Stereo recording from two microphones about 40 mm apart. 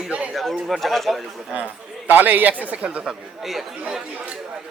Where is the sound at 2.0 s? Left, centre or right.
Right.